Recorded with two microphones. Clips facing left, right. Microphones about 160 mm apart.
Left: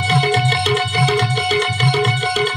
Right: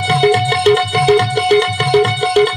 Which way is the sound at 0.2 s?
60° right (ahead or behind).